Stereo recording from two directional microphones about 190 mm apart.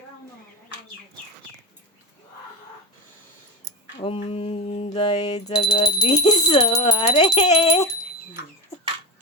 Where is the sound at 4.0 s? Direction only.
30° left (ahead or behind).